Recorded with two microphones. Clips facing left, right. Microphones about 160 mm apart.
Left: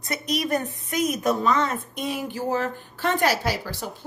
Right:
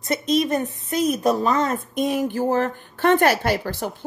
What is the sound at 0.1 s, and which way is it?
A woman's voice, 25° right (ahead or behind).